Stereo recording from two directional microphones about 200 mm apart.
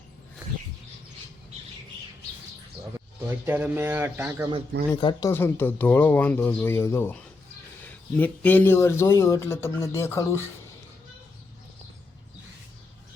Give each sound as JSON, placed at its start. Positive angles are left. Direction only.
{"t": 3.2, "sound": "speech", "side_deg": -10}
{"t": 4.9, "sound": "speech", "side_deg": 25}
{"t": 5.3, "sound": "speech", "side_deg": 10}